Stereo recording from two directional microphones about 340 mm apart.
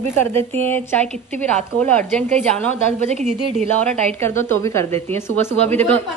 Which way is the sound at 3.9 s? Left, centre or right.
Centre.